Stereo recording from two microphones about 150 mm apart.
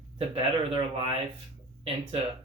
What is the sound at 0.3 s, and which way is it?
Speech, 40° right (ahead or behind).